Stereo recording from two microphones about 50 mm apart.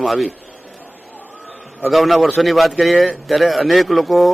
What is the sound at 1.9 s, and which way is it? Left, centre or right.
A man's voice, centre.